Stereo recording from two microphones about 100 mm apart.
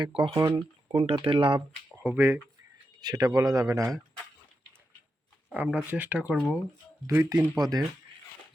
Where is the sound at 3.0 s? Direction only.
40° right (ahead or behind).